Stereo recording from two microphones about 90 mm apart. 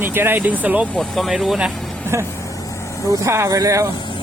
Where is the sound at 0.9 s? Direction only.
5° left (ahead or behind).